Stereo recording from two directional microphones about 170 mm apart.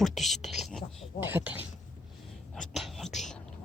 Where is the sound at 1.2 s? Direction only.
10° right (ahead or behind).